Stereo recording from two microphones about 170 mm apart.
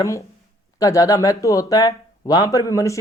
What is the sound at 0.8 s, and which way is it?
A man's voice, 20° left (ahead or behind).